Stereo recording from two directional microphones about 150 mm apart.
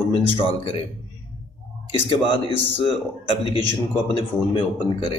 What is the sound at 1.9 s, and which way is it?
A man's voice, 35° left (ahead or behind).